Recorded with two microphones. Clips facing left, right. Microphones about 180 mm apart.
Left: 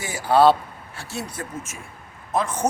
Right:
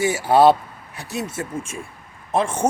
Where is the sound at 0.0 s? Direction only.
25° right (ahead or behind).